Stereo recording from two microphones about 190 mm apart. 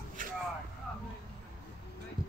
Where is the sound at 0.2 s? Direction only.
45° right (ahead or behind).